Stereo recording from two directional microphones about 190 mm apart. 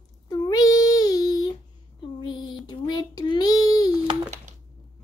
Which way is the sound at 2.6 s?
20° left (ahead or behind).